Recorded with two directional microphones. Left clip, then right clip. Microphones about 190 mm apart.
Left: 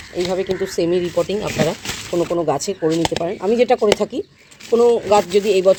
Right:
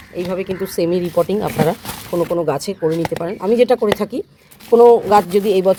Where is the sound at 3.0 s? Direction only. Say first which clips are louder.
Left 1 dB; 20° right (ahead or behind).